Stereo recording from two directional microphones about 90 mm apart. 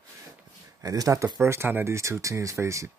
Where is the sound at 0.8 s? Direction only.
40° right (ahead or behind).